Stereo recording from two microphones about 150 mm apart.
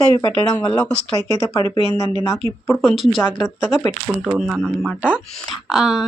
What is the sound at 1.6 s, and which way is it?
Speech, 35° right (ahead or behind).